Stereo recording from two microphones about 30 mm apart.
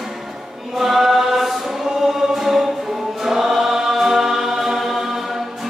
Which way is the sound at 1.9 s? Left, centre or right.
Centre.